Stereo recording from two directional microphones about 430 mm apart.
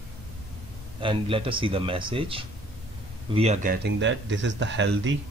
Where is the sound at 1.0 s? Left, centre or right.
Centre.